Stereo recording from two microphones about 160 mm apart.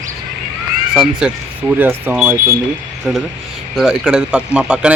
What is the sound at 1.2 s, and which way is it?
Speech, 5° right (ahead or behind).